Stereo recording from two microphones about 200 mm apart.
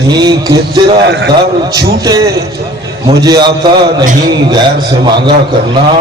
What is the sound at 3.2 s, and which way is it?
Speech, 20° right (ahead or behind).